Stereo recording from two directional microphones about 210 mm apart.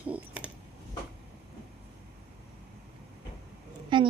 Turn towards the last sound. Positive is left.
turn(degrees=-25)  # may be behind; listen again after turning